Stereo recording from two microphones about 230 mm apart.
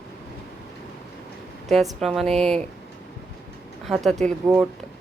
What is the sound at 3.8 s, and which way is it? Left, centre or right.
Speech, centre.